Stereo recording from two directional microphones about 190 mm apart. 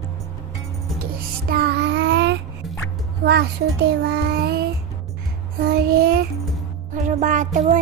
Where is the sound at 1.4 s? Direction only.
55° right (ahead or behind).